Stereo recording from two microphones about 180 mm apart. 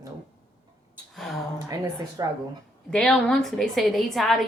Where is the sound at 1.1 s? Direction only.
Centre (ahead or behind).